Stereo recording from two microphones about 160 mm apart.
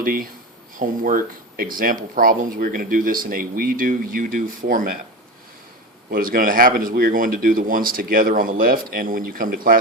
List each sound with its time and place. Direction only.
0.0 s speech: 65° right (ahead or behind)
6.1 s speech: 65° right (ahead or behind)